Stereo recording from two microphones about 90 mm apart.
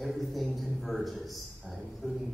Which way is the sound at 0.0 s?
Centre (ahead or behind).